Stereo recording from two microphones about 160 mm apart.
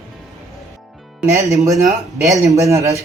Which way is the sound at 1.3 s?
20° right (ahead or behind).